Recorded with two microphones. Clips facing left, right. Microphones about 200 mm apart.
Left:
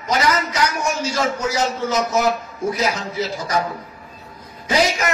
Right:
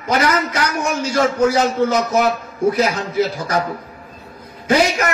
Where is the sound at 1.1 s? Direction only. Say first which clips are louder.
Right 6 dB; 60° right (ahead or behind).